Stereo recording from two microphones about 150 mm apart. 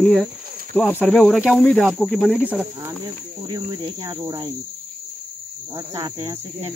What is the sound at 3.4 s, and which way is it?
Cricket, 25° right (ahead or behind).